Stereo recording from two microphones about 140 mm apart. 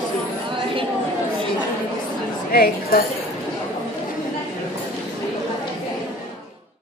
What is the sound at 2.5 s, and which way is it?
Speech, 90° left.